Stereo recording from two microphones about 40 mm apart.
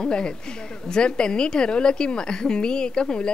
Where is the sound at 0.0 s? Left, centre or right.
Left.